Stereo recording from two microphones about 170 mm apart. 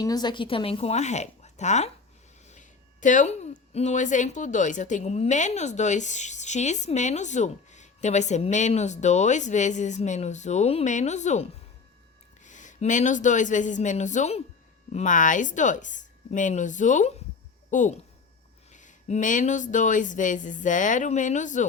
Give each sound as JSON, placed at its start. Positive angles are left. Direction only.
{"t": 0.0, "sound": "a woman's voice", "side_deg": 25}
{"t": 12.5, "sound": "speech", "side_deg": 45}